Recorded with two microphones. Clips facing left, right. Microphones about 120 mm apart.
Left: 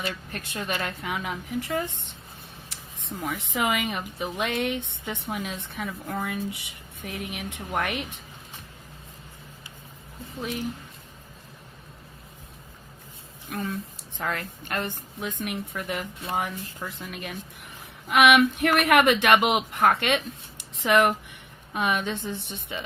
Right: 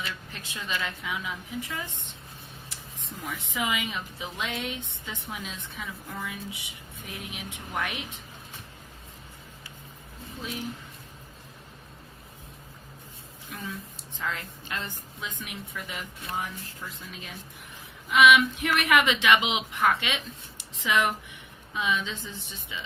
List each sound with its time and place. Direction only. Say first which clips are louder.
0.0 s a woman's voice: left 5 dB; 55° left (ahead or behind)
2.6 s a sound: left 6 dB; 65° left (ahead or behind)
3.5 s a woman's voice: left 4 dB; 60° left (ahead or behind)
13.5 s a woman's voice: left 7 dB; 60° left (ahead or behind)